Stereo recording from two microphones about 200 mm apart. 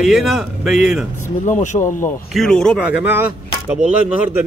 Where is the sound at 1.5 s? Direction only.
40° left (ahead or behind).